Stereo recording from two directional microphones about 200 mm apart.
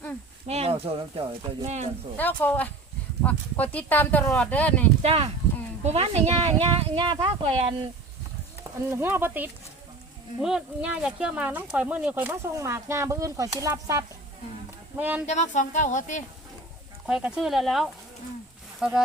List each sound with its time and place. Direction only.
0.4 s speech: 30° right (ahead or behind)
2.1 s speech: 10° left (ahead or behind)
5.0 s speech: 30° right (ahead or behind)
8.9 s speech: 10° right (ahead or behind)
15.3 s speech: 35° left (ahead or behind)
17.1 s speech: 5° right (ahead or behind)